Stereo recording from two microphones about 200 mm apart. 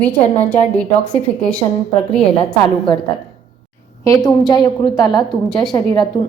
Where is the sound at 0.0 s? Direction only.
10° left (ahead or behind).